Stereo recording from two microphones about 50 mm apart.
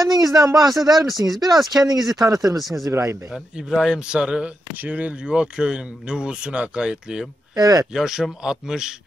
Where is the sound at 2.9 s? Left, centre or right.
Right.